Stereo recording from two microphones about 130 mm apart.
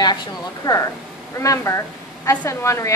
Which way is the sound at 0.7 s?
25° left (ahead or behind).